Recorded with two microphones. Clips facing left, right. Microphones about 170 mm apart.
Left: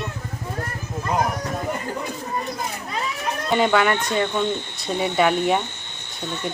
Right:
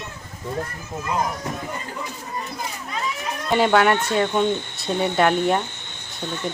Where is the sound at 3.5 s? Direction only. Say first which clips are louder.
Right 2 dB; centre (ahead or behind).